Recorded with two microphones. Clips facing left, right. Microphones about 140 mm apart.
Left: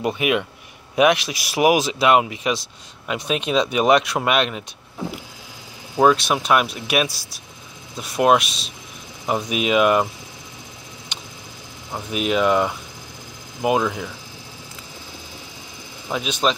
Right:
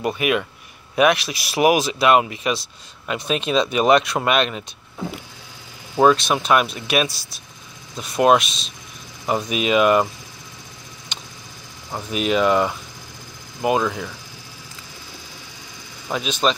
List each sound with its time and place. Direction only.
0.0 s speech: 15° left (ahead or behind)
5.9 s speech: 5° left (ahead or behind)
9.2 s speech: centre (ahead or behind)
11.1 s a sound: 10° left (ahead or behind)
11.9 s speech: 5° left (ahead or behind)
16.1 s speech: 10° left (ahead or behind)